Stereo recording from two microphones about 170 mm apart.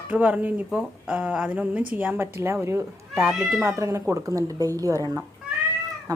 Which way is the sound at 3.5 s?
15° right (ahead or behind).